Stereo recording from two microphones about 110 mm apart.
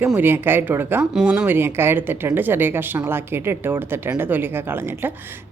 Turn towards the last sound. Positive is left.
turn(degrees=-20)  # may be behind; listen again after turning